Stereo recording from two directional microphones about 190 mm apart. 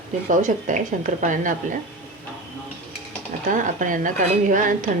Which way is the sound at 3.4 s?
45° right (ahead or behind).